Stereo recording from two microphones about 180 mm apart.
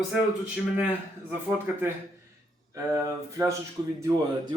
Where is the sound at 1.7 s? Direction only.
10° right (ahead or behind).